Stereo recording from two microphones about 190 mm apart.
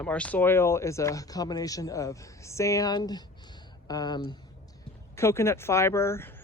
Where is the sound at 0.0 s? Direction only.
5° left (ahead or behind).